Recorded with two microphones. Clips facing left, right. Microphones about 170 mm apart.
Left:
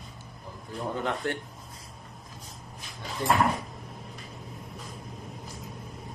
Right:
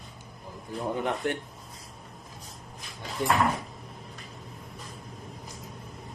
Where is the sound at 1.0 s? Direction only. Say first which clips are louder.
Even; 15° right (ahead or behind).